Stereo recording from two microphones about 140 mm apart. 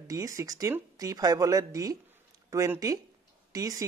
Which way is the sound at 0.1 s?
25° right (ahead or behind).